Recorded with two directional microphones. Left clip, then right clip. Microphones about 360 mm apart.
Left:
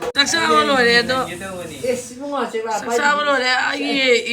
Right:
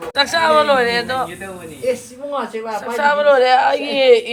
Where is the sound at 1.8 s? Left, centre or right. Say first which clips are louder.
Right 2 dB; right.